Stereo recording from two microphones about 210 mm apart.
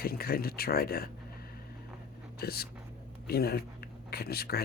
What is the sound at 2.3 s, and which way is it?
Speech, 50° left (ahead or behind).